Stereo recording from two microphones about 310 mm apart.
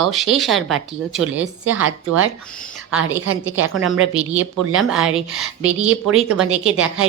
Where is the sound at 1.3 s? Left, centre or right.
Right.